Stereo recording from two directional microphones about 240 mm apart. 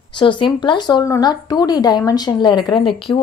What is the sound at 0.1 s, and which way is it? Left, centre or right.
A woman's voice, centre.